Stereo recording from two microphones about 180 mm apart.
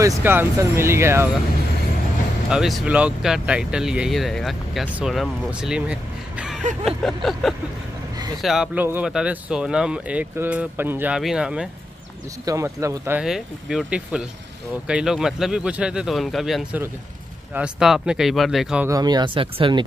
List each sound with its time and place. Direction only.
0.0 s speech: 15° right (ahead or behind)
2.5 s speech: 5° right (ahead or behind)
12.4 s speech: 15° right (ahead or behind)
13.2 s speech: 5° right (ahead or behind)
18.9 s speech: 20° right (ahead or behind)